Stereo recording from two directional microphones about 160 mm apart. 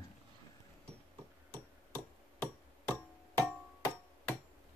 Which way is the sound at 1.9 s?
10° left (ahead or behind).